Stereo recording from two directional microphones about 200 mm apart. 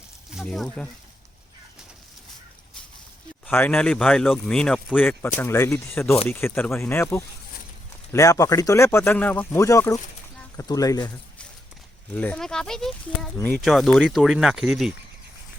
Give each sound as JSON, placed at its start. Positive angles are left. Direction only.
{"t": 0.3, "sound": "speech", "side_deg": 0}
{"t": 3.4, "sound": "a man's voice", "side_deg": 10}
{"t": 12.1, "sound": "speech", "side_deg": 5}